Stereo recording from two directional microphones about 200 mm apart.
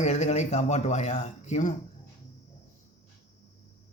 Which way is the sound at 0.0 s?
35° left (ahead or behind).